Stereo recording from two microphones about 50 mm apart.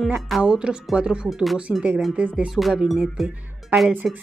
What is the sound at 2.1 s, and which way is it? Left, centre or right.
Speech, right.